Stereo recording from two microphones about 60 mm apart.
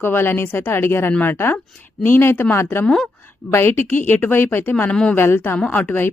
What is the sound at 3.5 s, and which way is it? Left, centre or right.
Speech, left.